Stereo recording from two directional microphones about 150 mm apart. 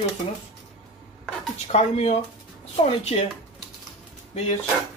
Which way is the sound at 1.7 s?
45° left (ahead or behind).